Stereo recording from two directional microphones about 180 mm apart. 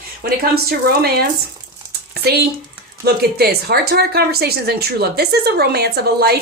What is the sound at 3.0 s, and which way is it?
Speech, 60° right (ahead or behind).